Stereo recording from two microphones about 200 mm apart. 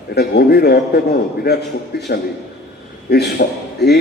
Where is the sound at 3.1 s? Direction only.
55° left (ahead or behind).